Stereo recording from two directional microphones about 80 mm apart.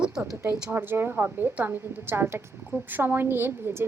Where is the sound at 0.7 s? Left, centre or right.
Right.